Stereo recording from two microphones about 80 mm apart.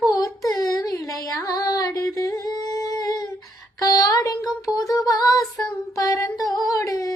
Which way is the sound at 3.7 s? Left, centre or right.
Left.